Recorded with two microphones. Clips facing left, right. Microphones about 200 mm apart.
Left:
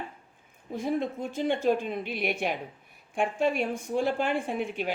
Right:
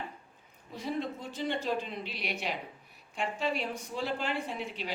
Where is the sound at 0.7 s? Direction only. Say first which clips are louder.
Left 6 dB; 50° left (ahead or behind).